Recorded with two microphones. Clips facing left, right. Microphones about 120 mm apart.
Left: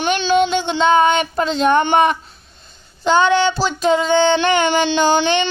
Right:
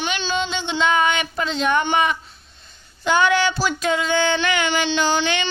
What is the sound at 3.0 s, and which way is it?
Female singing, 25° left (ahead or behind).